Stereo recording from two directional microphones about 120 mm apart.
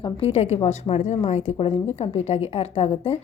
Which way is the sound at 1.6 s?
50° left (ahead or behind).